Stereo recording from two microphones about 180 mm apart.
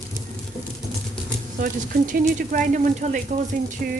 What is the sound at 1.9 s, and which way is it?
Dishes, 50° right (ahead or behind).